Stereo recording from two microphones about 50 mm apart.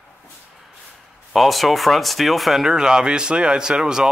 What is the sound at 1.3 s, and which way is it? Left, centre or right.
Speech, centre.